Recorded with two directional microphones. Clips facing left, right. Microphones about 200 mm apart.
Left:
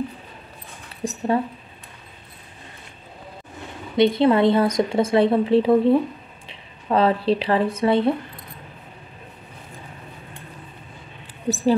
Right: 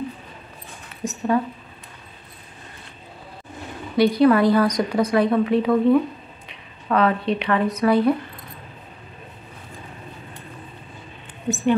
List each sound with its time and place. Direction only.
1.0 s speech: 30° left (ahead or behind)
3.9 s speech: 25° left (ahead or behind)
11.4 s speech: 35° left (ahead or behind)